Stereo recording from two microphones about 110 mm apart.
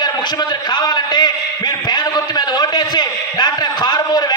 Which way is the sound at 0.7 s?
40° left (ahead or behind).